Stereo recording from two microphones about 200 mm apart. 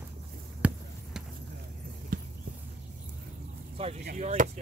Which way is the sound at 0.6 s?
5° right (ahead or behind).